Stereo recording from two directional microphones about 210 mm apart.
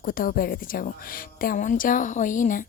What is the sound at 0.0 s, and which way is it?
A woman's voice, 40° left (ahead or behind).